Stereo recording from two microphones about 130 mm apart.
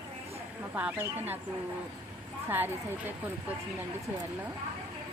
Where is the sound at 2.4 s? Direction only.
15° right (ahead or behind).